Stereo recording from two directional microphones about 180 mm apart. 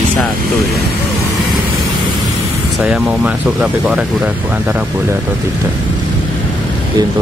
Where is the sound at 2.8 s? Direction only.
5° right (ahead or behind).